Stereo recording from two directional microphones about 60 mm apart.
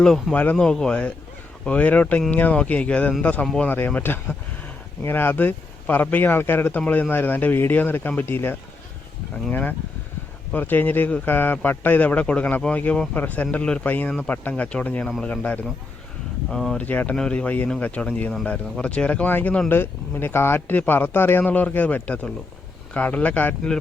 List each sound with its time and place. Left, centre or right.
0.0 s speech: centre; by 3.4 s left
3.4 s speech: centre
3.7 s speech: left
14.5 s speech: centre
16.5 s speech: centre
16.7 s speech: left
17.2 s speech: centre